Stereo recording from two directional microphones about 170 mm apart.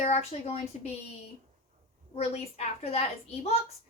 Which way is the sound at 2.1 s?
40° left (ahead or behind).